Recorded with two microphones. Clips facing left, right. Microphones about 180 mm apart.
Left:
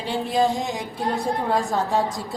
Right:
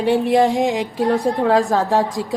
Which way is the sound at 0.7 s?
90° right.